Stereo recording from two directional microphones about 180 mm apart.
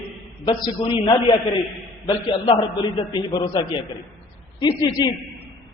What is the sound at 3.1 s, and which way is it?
Speech, 25° left (ahead or behind).